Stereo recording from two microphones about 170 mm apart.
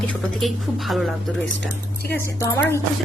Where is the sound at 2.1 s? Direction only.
15° left (ahead or behind).